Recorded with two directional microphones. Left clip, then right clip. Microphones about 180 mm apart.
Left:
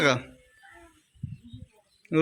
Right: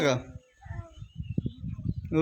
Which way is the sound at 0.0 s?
5° right (ahead or behind).